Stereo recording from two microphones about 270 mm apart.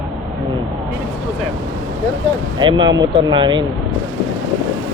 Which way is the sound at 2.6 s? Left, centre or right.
Centre.